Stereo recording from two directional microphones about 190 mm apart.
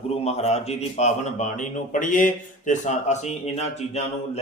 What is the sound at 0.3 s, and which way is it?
Speech, 35° left (ahead or behind).